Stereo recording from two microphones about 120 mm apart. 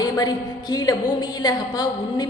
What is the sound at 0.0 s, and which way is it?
A woman's voice, 35° left (ahead or behind).